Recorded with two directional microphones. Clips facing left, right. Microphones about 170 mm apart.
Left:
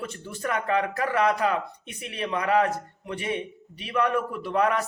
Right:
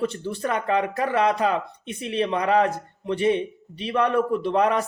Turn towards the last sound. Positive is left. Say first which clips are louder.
# right 3 dB
turn(degrees=-25)  # may be behind; listen again after turning